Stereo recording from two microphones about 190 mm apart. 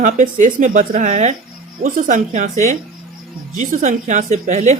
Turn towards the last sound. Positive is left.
turn(degrees=-40)  # may be behind; listen again after turning